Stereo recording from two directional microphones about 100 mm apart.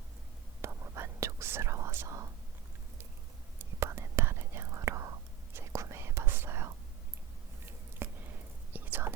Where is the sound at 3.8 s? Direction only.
30° right (ahead or behind).